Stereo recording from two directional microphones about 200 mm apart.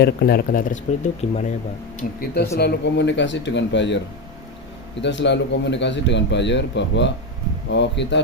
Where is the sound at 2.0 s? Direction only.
50° left (ahead or behind).